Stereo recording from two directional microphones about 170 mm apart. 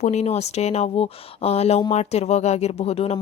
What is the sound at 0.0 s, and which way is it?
Speech, 40° left (ahead or behind).